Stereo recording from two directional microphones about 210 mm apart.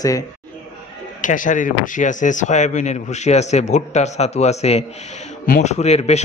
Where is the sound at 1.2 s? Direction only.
40° left (ahead or behind).